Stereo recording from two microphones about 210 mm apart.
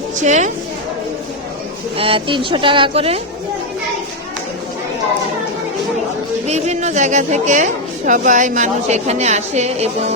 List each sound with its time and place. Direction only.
0.2 s a woman's voice: 35° right (ahead or behind)
2.0 s speech: 25° right (ahead or behind)
6.5 s a woman's voice: 35° right (ahead or behind)